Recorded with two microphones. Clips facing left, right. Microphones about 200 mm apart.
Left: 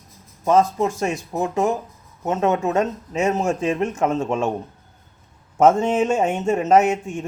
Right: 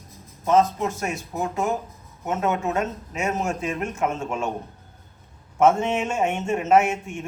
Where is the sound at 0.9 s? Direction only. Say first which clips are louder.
Left 5 dB; 30° left (ahead or behind).